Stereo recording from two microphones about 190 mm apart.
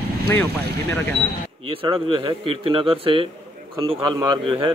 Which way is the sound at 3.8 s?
15° right (ahead or behind).